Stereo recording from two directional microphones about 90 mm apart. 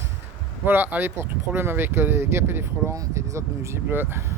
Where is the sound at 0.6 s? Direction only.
20° right (ahead or behind).